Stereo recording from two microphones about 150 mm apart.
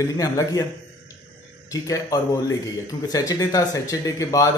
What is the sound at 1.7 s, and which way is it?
Speech, 25° left (ahead or behind).